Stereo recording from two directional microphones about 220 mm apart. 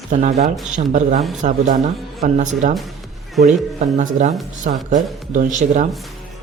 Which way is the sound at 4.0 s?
35° right (ahead or behind).